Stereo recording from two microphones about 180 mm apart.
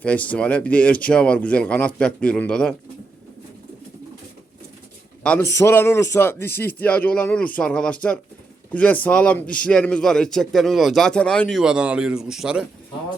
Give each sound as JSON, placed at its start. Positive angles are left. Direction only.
{"t": 0.0, "sound": "speech", "side_deg": 10}
{"t": 5.2, "sound": "speech", "side_deg": 5}